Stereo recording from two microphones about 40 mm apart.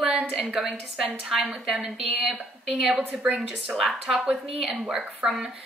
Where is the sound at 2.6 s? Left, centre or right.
Centre.